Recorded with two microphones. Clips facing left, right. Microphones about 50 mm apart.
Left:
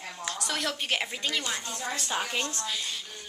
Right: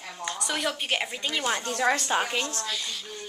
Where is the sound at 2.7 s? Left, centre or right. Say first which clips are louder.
Right 1 dB; centre.